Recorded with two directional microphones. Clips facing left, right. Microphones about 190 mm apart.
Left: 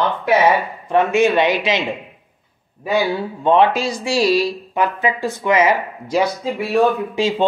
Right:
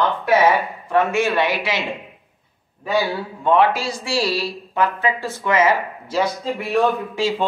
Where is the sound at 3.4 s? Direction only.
20° left (ahead or behind).